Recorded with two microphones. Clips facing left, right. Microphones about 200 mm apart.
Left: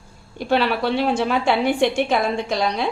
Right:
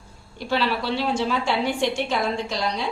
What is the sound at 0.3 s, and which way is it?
A woman's voice, 55° left (ahead or behind).